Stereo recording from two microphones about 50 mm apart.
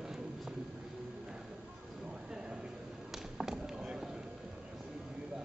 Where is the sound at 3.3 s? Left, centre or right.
Centre.